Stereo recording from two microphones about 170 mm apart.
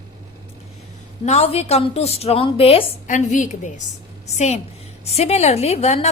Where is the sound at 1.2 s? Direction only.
40° left (ahead or behind).